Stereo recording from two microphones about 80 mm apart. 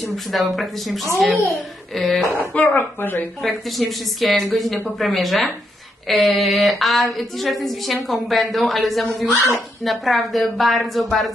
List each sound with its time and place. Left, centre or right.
0.1 s speech: centre
2.5 s speech: left
3.4 s speech: centre